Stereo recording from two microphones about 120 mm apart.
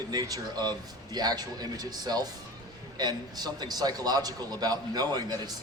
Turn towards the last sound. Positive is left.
turn(degrees=-35)  # may be behind; listen again after turning